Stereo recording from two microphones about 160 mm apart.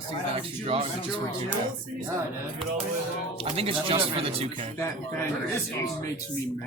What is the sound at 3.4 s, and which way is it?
Speech, 35° right (ahead or behind).